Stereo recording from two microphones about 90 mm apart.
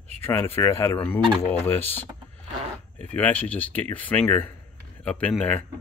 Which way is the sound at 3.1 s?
15° left (ahead or behind).